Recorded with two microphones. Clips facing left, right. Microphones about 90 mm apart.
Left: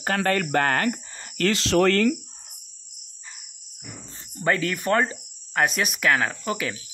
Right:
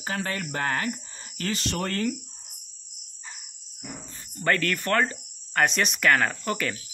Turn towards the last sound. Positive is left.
turn(degrees=5)  # may be behind; listen again after turning